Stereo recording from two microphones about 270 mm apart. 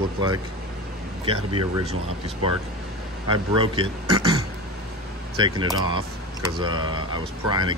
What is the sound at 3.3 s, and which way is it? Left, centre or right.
A man's voice, centre.